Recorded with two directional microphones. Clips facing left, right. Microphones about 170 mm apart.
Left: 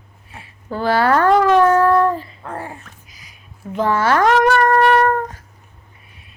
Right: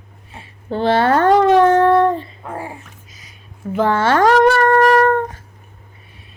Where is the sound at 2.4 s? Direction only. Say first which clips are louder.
Right 1 dB; 10° right (ahead or behind).